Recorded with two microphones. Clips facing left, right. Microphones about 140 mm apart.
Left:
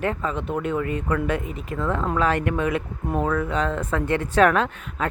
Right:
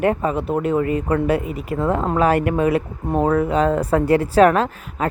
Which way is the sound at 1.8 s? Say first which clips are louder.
Right 5 dB; 35° right (ahead or behind).